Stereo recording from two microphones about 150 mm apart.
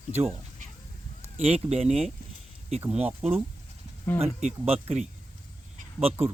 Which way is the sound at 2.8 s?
10° right (ahead or behind).